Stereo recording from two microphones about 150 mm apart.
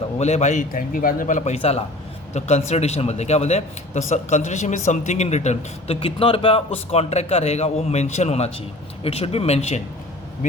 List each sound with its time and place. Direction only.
0.2 s a man's voice: 50° left (ahead or behind)